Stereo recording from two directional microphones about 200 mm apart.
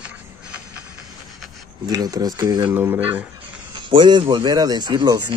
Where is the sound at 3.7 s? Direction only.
25° right (ahead or behind).